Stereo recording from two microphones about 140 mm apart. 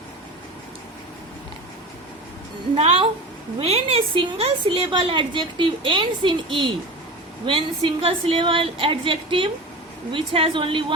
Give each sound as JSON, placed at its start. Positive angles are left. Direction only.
{"t": 2.7, "sound": "a woman's voice", "side_deg": -45}